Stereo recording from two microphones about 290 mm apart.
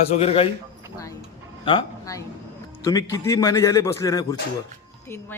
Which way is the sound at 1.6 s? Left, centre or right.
Centre.